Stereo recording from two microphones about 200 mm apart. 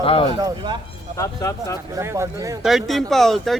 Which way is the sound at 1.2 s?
15° left (ahead or behind).